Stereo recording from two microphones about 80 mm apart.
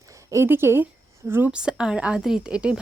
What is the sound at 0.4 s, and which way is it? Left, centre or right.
Speech, right.